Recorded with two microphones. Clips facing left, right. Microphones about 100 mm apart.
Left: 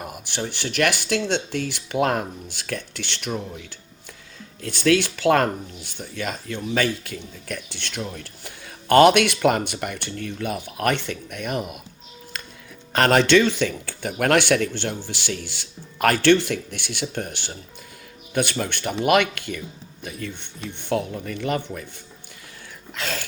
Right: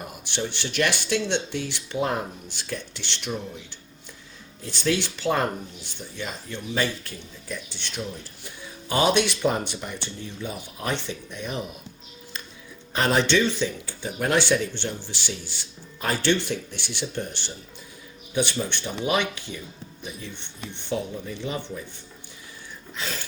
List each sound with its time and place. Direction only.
0.0 s speech: 50° left (ahead or behind); by 2.2 s 75° left (ahead or behind)
2.5 s speech: 60° left (ahead or behind)
4.9 s speech: 55° left (ahead or behind); by 11.8 s 85° left
12.9 s speech: 85° left; by 14.7 s 65° left (ahead or behind)
14.7 s speech: 50° left (ahead or behind)
15.3 s speech: 65° left (ahead or behind)
23.0 s a sound: 90° left